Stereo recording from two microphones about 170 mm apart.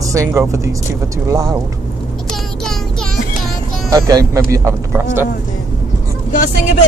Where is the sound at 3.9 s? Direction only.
20° right (ahead or behind).